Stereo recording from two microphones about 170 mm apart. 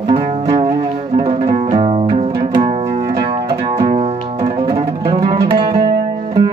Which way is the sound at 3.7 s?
35° right (ahead or behind).